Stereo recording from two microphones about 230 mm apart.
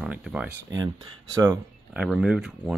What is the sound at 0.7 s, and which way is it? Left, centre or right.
Speech, centre.